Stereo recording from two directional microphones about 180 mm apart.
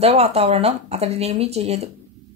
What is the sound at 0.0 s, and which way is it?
Speech, 35° right (ahead or behind).